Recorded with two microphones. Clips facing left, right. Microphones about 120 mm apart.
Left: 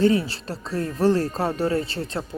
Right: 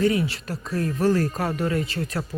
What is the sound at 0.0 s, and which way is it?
Speech, 30° left (ahead or behind).